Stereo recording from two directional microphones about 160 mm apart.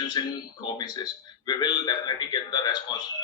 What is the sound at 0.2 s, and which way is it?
A man's voice, 25° left (ahead or behind).